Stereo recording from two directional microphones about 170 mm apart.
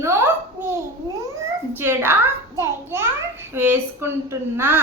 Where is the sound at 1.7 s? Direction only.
15° right (ahead or behind).